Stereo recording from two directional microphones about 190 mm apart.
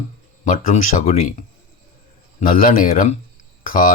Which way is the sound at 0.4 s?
45° left (ahead or behind).